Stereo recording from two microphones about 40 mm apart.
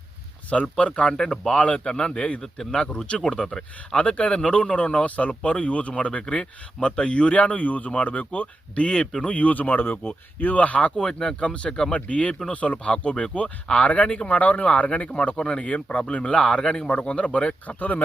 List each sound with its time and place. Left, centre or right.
0.5 s speech: left
1.1 s speech: centre
1.5 s speech: left
2.4 s speech: centre
3.1 s a man's voice: left
3.9 s a man's voice: left
9.0 s a man's voice: centre
9.3 s a man's voice: left